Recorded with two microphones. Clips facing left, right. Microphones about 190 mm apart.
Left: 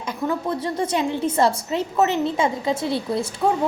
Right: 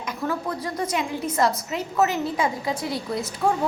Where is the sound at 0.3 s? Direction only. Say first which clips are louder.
Left 4 dB; 30° left (ahead or behind).